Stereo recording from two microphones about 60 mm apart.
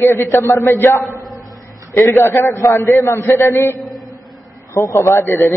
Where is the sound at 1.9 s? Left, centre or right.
Left.